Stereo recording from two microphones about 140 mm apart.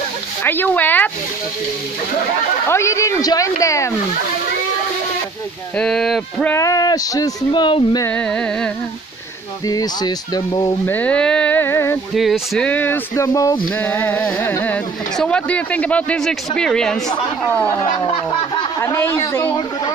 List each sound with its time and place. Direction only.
0.4 s speech: 15° left (ahead or behind)
2.7 s speech: 20° left (ahead or behind)
5.8 s speech: 5° left (ahead or behind)
6.5 s speech: 25° left (ahead or behind)
8.1 s speech: 5° left (ahead or behind)
9.7 s speech: 25° left (ahead or behind)
10.9 s speech: 10° left (ahead or behind)
12.2 s speech: 5° left (ahead or behind); by 13.6 s 25° left (ahead or behind)
13.7 s speech: 10° left (ahead or behind)
18.0 s snicker: 35° left (ahead or behind)
18.8 s a woman's voice: 15° left (ahead or behind)